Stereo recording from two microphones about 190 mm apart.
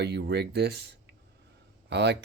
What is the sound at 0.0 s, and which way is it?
Speech, 60° right (ahead or behind).